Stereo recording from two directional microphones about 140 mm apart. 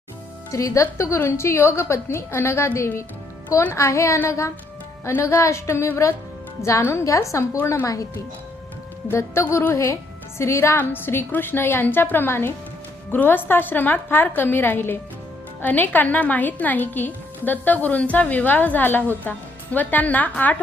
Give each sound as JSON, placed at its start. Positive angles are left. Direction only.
{"t": 0.5, "sound": "a woman's voice", "side_deg": 20}
{"t": 9.0, "sound": "a woman's voice", "side_deg": 20}